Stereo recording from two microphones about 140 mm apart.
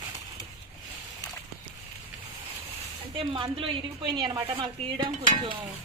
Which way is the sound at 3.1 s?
40° right (ahead or behind).